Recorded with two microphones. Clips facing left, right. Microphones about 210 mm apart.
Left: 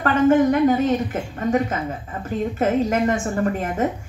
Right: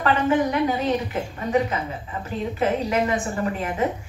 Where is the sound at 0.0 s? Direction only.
50° left (ahead or behind).